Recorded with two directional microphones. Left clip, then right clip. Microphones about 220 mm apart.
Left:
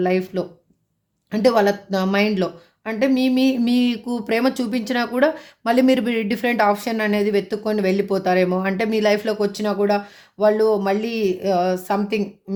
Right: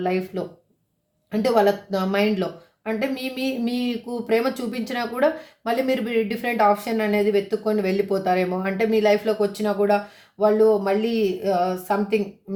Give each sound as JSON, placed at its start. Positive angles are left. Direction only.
{"t": 0.0, "sound": "speech", "side_deg": 40}